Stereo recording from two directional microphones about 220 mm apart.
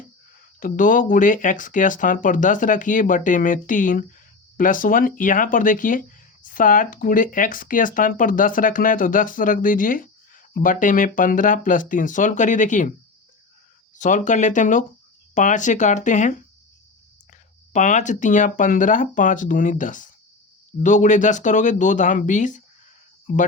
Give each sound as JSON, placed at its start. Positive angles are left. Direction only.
{"t": 0.6, "sound": "speech", "side_deg": 40}
{"t": 13.9, "sound": "speech", "side_deg": 35}
{"t": 17.7, "sound": "speech", "side_deg": 35}